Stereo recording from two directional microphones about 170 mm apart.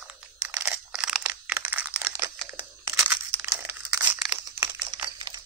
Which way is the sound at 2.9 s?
10° right (ahead or behind).